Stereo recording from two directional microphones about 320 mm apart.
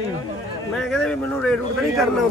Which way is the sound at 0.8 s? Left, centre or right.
Centre.